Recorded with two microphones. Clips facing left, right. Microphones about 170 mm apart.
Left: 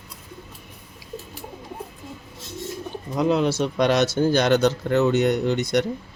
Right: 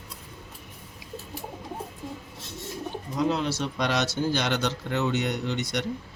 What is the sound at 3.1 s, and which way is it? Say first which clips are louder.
Speech: left 6 dB; 55° left (ahead or behind).